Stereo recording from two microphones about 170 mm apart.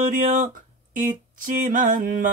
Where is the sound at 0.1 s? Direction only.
55° right (ahead or behind).